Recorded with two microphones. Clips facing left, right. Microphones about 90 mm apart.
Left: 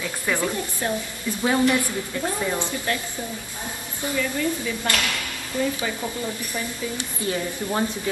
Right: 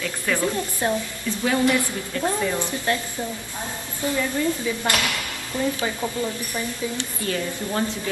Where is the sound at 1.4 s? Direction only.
20° left (ahead or behind).